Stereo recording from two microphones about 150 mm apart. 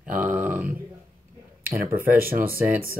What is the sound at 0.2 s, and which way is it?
Grunt, 10° right (ahead or behind).